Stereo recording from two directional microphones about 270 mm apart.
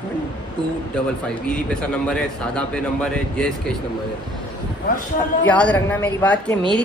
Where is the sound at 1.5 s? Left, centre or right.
Centre.